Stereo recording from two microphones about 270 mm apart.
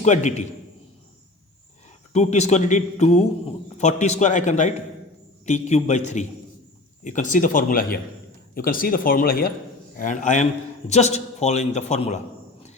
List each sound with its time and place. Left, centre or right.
0.0 s a man's voice: left
2.1 s a man's voice: left